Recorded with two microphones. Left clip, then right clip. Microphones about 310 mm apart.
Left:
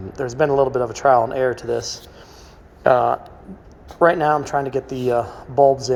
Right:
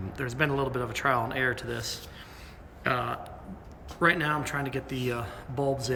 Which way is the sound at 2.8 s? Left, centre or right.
Centre.